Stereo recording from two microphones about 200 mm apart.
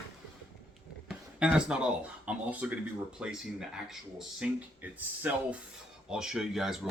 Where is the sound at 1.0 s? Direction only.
5° right (ahead or behind).